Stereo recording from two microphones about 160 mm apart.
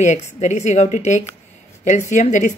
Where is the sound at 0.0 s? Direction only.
45° left (ahead or behind).